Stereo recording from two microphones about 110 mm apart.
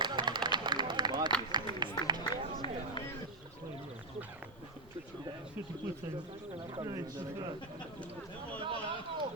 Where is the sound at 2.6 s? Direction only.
50° left (ahead or behind).